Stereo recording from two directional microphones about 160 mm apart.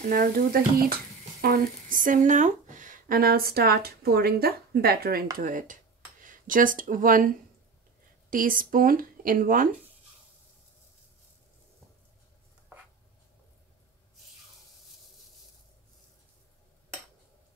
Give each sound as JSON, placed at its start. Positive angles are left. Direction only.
{"t": 0.1, "sound": "speech", "side_deg": -60}
{"t": 5.4, "sound": "speech", "side_deg": -55}